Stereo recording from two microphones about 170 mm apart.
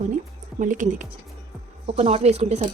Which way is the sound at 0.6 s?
50° right (ahead or behind).